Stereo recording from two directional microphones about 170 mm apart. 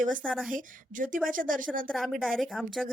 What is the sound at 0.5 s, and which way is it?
A woman's voice, 50° right (ahead or behind).